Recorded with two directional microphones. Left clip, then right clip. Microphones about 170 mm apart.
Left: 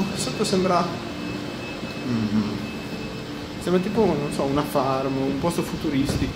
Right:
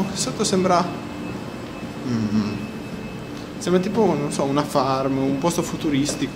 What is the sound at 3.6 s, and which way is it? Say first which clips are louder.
Speech: right 2 dB; 10° right (ahead or behind).